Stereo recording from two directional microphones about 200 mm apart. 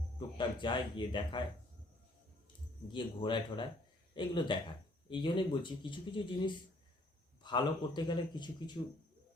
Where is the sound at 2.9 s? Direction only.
25° left (ahead or behind).